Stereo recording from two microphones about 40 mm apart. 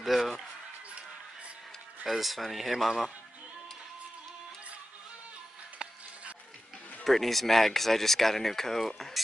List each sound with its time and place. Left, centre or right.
0.0 s basketball bounce: centre
2.0 s speech: centre
5.8 s music: right
7.1 s speech: centre